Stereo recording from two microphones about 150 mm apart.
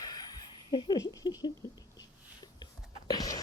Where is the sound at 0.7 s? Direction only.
30° left (ahead or behind).